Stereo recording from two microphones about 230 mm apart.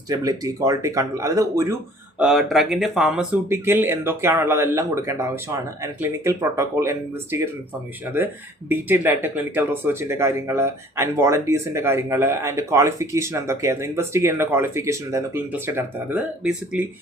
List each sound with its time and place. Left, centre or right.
0.1 s speech: centre
2.1 s speech: centre
8.7 s speech: centre